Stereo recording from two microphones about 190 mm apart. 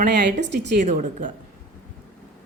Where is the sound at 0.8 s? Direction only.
45° right (ahead or behind).